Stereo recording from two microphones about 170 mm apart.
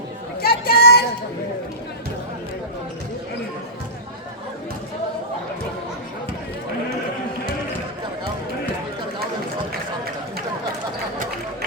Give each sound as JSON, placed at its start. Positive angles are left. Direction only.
{"t": 0.4, "sound": "chatter", "side_deg": 65}